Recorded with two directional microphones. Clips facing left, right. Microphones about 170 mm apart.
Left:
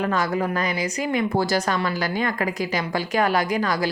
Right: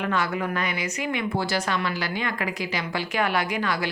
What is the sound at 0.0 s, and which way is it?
A woman's voice, 40° left (ahead or behind).